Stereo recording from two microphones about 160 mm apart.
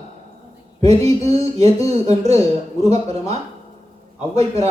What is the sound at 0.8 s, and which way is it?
Speech, 40° right (ahead or behind).